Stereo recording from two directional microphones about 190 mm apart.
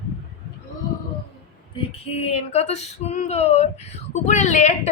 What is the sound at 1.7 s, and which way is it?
Female singing, 30° left (ahead or behind).